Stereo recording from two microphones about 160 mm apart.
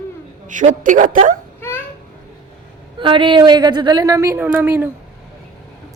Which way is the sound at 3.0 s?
30° right (ahead or behind).